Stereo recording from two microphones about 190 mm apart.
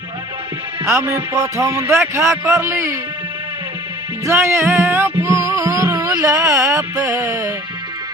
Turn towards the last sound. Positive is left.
turn(degrees=-15)  # may be behind; listen again after turning